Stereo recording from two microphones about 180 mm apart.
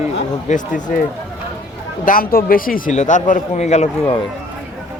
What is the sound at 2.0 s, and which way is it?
Speech, 50° left (ahead or behind).